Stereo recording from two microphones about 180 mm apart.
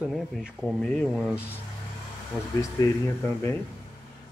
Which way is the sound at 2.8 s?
20° left (ahead or behind).